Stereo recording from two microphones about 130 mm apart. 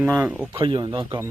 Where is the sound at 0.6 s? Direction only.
40° right (ahead or behind).